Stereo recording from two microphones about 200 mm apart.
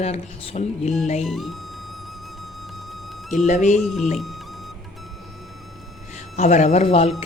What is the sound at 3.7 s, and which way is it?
Speech, centre (ahead or behind).